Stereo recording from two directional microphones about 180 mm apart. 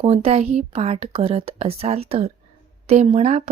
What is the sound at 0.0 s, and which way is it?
Speech, 35° right (ahead or behind).